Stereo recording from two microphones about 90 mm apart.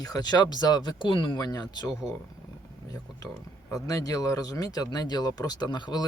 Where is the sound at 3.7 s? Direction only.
40° left (ahead or behind); by 6.0 s 55° left (ahead or behind).